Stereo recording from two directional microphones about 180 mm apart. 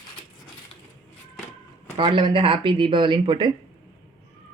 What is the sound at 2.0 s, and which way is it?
Speech, 25° right (ahead or behind).